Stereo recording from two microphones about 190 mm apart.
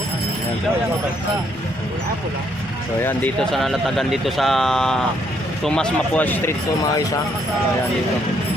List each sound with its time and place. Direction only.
3.0 s speech: 10° left (ahead or behind)